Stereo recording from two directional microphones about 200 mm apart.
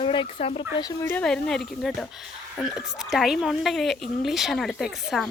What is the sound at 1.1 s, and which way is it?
Speech, 5° left (ahead or behind).